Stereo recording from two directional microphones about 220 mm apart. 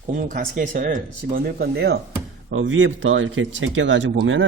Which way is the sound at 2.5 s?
60° right (ahead or behind).